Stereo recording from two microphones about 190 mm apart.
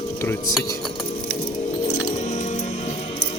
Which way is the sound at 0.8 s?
Centre (ahead or behind).